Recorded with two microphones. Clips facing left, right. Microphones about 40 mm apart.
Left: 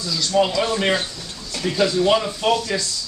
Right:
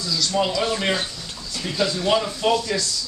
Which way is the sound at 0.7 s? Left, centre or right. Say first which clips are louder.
Left 3 dB; centre.